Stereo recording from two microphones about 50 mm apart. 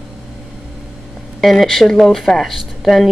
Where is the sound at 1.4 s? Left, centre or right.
Centre.